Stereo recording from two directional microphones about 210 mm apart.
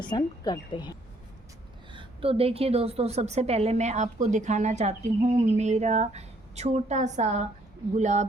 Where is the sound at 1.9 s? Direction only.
25° right (ahead or behind).